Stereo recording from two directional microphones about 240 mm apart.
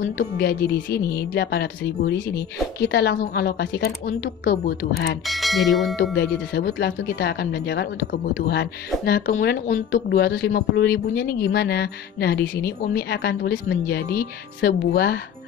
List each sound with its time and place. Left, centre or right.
0.4 s speech: left
5.2 s speech: centre
6.1 s speech: left